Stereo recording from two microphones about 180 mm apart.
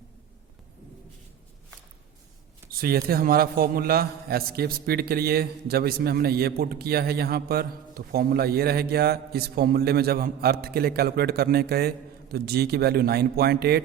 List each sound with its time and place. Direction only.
2.6 s a man's voice: 55° right (ahead or behind)